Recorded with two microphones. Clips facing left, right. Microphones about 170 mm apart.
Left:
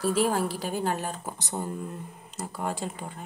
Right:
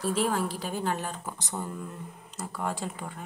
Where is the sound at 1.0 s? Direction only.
35° left (ahead or behind).